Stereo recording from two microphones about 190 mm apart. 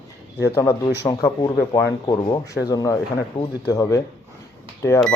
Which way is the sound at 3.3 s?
35° left (ahead or behind).